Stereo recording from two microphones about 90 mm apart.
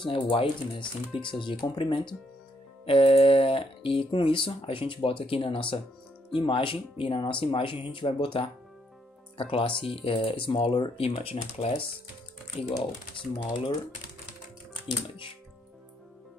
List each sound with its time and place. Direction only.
0.0 s speech: 70° left (ahead or behind)
2.8 s speech: 90° left
9.4 s speech: 90° left
13.4 s speech: 60° left (ahead or behind)